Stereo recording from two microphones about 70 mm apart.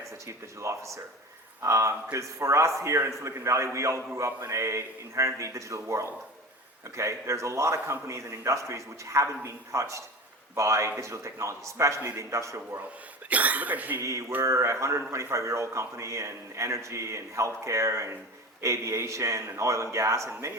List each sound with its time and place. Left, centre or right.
0.3 s a man's voice: right
13.3 s speech: right
14.0 s a man's voice: right